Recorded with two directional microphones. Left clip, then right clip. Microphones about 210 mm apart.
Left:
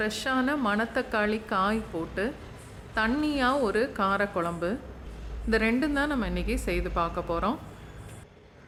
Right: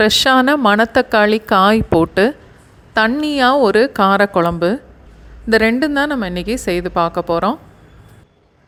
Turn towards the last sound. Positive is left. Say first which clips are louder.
# right 12 dB
turn(degrees=-35)  # may be behind; listen again after turning